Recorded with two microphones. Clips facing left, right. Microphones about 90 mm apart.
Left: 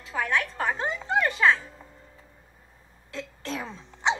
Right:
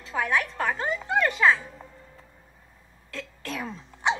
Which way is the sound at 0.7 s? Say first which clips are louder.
Right 1 dB; 25° left (ahead or behind).